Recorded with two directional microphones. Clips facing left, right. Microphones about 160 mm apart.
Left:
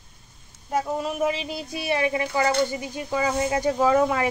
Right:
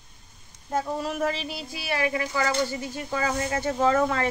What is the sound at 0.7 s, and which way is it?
A woman's voice, 10° left (ahead or behind).